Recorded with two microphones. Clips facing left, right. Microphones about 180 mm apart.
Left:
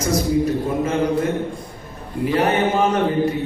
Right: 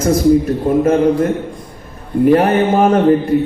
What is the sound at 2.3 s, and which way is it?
Speech, 55° right (ahead or behind).